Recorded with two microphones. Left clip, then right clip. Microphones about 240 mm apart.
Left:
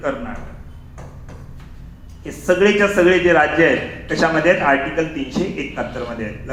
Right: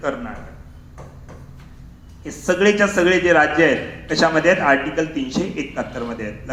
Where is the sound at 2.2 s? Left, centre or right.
Right.